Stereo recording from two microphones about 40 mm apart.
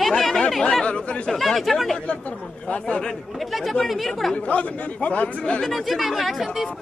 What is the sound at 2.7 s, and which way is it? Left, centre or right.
Speech, left.